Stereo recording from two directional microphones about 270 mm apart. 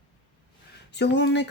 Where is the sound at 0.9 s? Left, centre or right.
Left.